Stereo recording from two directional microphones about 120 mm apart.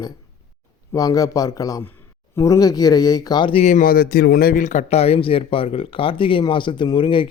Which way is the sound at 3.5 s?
70° left (ahead or behind).